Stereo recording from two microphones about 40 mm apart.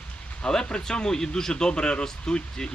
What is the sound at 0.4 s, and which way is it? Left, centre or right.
Speech, left.